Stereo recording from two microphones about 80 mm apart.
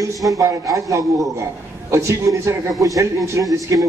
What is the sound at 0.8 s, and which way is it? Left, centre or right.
A man's voice, right.